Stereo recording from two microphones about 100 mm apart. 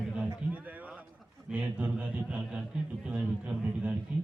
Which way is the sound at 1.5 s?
15° right (ahead or behind).